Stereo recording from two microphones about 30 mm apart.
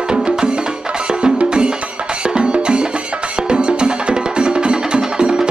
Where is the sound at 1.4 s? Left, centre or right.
Right.